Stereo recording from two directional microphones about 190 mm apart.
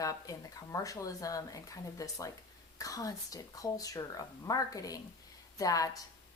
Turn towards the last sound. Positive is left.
turn(degrees=20)  # may be behind; listen again after turning